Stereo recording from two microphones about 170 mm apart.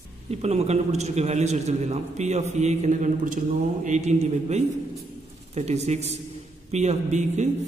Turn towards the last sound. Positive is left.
turn(degrees=-40)  # may be behind; listen again after turning